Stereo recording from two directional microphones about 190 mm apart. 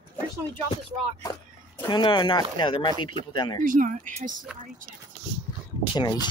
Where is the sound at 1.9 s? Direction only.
25° left (ahead or behind).